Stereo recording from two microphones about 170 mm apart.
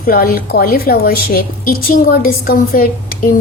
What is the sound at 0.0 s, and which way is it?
A woman's voice, 60° left (ahead or behind).